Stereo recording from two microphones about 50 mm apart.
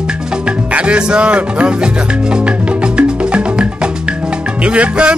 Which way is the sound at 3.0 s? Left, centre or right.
Right.